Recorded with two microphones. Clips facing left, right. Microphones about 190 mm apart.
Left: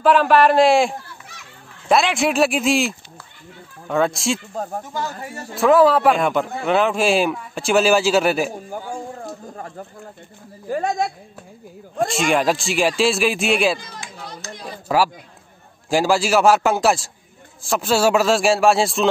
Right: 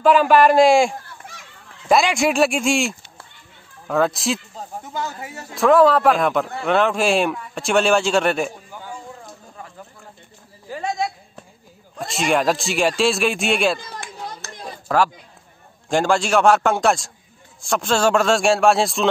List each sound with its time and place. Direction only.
0.0 s a man's voice: centre (ahead or behind)
4.6 s speech: 55° left (ahead or behind)
5.5 s a man's voice: centre (ahead or behind)
8.5 s a man's voice: 45° left (ahead or behind)
10.7 s a man's voice: 50° left (ahead or behind)
12.1 s a man's voice: centre (ahead or behind)
13.9 s a sound: 60° right (ahead or behind)
14.9 s a man's voice: 5° left (ahead or behind)